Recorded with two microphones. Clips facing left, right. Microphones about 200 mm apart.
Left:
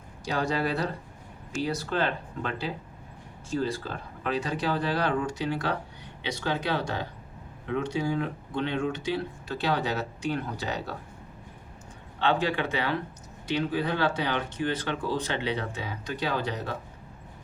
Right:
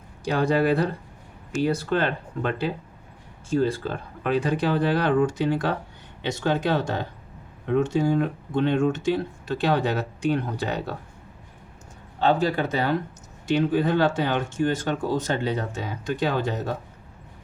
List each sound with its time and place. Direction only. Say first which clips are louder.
0.3 s speech: right 7 dB; 55° right (ahead or behind)
12.2 s speech: right 4 dB; 40° right (ahead or behind)